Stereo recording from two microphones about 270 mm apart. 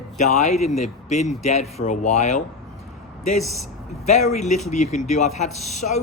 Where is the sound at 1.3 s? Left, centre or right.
Left.